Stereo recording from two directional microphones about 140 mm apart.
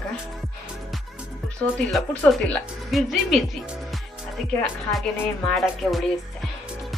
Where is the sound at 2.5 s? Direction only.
Centre (ahead or behind).